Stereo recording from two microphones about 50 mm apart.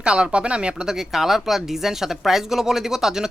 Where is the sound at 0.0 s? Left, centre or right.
Centre.